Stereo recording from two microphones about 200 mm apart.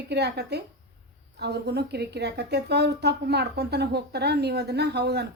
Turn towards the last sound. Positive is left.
turn(degrees=-55)  # may be behind; listen again after turning